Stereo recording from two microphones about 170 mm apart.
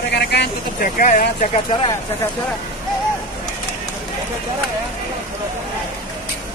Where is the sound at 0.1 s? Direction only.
80° left.